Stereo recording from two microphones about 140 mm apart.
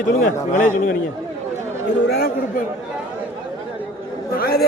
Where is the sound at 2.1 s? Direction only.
90° left.